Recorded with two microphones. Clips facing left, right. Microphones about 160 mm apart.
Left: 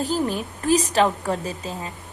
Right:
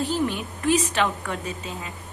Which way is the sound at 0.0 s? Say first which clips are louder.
Left 1 dB; 40° left (ahead or behind).